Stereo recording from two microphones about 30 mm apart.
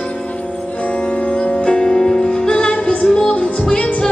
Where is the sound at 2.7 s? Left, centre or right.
Left.